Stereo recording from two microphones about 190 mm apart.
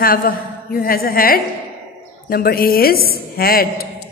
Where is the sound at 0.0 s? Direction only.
50° left (ahead or behind).